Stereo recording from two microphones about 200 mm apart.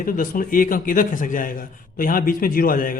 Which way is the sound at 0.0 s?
45° left (ahead or behind).